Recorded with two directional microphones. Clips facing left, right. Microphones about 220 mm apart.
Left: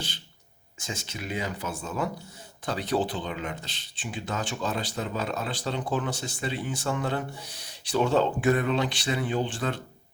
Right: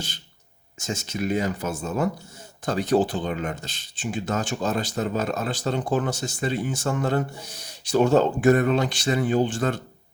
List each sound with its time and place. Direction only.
0.8 s speech: 45° right (ahead or behind)